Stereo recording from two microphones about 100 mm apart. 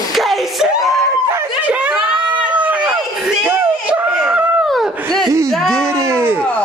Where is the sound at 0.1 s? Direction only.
Centre (ahead or behind).